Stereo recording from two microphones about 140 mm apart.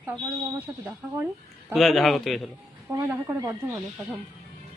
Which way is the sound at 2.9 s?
15° right (ahead or behind).